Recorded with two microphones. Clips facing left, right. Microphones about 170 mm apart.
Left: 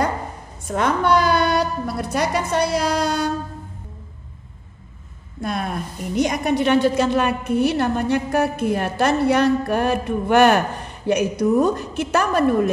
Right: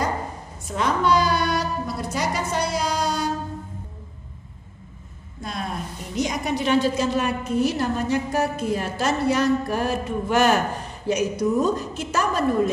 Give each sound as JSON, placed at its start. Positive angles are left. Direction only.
{"t": 0.7, "sound": "a woman's voice", "side_deg": 55}
{"t": 5.4, "sound": "a woman's voice", "side_deg": 60}